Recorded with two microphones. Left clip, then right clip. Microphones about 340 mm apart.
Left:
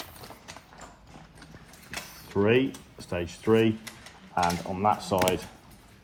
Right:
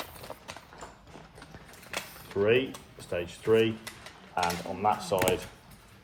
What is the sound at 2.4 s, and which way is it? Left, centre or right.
Speech, centre.